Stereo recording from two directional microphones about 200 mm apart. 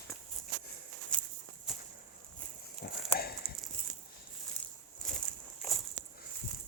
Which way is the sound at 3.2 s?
50° left (ahead or behind).